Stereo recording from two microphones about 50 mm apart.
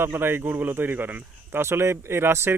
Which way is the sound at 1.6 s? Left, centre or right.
Right.